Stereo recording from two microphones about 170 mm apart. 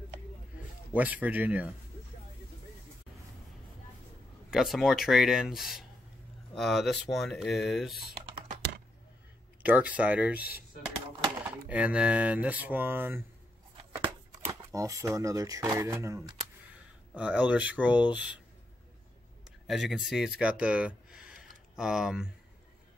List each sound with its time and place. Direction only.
0.9 s speech: 10° right (ahead or behind)
4.5 s speech: centre (ahead or behind)
9.6 s speech: 10° right (ahead or behind)
11.4 s speech: 10° right (ahead or behind)
13.9 s shuffling cards: 15° right (ahead or behind)
15.7 s speech: 15° right (ahead or behind)
19.4 s speech: centre (ahead or behind)